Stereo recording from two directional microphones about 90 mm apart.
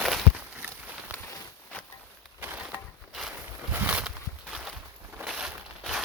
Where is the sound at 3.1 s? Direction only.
5° right (ahead or behind).